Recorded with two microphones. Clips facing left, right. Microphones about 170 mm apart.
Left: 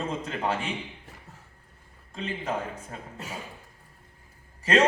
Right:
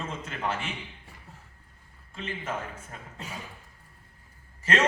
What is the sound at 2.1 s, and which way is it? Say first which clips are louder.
Speech: left 3 dB; 35° left (ahead or behind).